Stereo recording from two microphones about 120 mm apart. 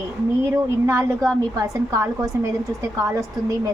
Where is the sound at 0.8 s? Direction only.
25° right (ahead or behind).